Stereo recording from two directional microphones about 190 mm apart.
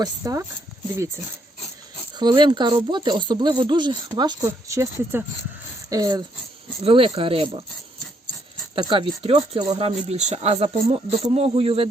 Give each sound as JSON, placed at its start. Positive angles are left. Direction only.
{"t": 0.0, "sound": "speech", "side_deg": -15}
{"t": 2.1, "sound": "speech", "side_deg": -25}
{"t": 8.7, "sound": "speech", "side_deg": -25}